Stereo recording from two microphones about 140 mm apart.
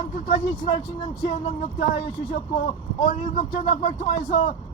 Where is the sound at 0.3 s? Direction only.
55° left (ahead or behind).